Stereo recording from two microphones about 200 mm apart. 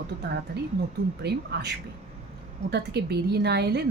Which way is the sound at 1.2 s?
55° right (ahead or behind).